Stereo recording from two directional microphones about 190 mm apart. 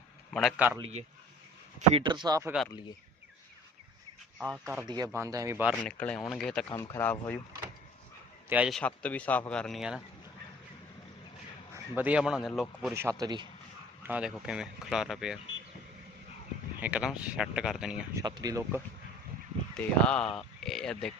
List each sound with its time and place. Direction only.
0.3 s speech: centre (ahead or behind)
1.9 s speech: 25° right (ahead or behind)
4.4 s speech: centre (ahead or behind)
4.8 s speech: 20° right (ahead or behind)
5.9 s speech: 5° left (ahead or behind)
6.7 s speech: 15° left (ahead or behind)
8.4 s speech: 5° right (ahead or behind)
8.8 s speech: 5° left (ahead or behind)
11.7 s speech: 10° right (ahead or behind)
12.9 s speech: 15° right (ahead or behind)
14.1 s speech: 5° right (ahead or behind)
16.8 s speech: 5° right (ahead or behind)
18.1 s speech: 20° right (ahead or behind)
19.7 s speech: 5° left (ahead or behind)